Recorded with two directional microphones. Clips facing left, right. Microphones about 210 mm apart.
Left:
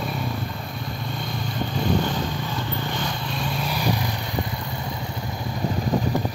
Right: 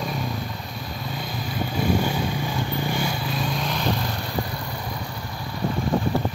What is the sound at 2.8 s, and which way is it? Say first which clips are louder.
Vehicle: right 2 dB; 10° right (ahead or behind).